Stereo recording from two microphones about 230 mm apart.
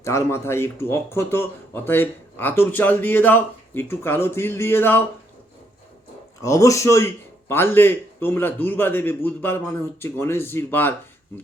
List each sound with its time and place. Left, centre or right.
0.0 s speech: centre
6.4 s speech: centre